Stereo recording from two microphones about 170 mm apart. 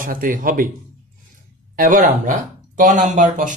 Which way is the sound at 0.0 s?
55° right (ahead or behind).